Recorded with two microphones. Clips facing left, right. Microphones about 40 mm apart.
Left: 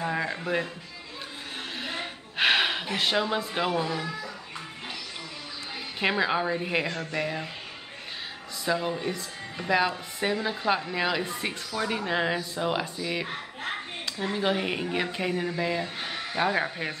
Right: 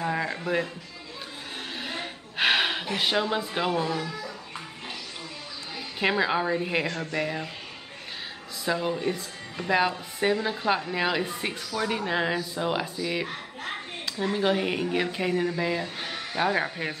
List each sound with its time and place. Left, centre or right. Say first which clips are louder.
0.0 s music: right 1 dB; centre
1.8 s a sound: left 1 dB; centre
5.9 s a woman's voice: right 1 dB; centre
8.6 s a woman's voice: right 1 dB; centre
13.3 s children playing: left 1 dB; centre
14.1 s a woman's voice: right 2 dB; centre